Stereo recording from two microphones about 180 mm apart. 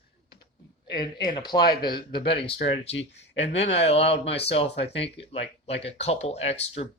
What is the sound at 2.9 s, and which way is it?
Speech, 90° left.